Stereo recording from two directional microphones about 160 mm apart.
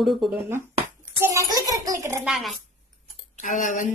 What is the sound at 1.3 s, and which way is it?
Speech, 25° right (ahead or behind).